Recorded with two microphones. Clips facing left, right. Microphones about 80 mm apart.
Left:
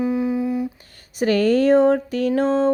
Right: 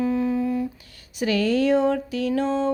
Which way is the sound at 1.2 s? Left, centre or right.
Left.